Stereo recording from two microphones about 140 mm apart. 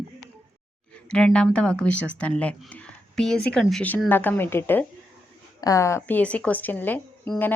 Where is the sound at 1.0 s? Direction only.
5° left (ahead or behind).